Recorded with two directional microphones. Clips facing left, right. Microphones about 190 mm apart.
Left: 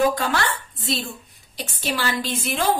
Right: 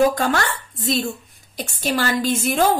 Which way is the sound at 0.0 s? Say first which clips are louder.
Right 3 dB; 45° right (ahead or behind).